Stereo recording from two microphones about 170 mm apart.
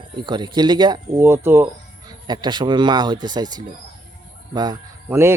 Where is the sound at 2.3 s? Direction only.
25° right (ahead or behind).